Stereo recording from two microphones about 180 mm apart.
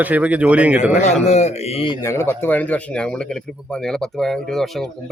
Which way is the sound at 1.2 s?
40° left (ahead or behind).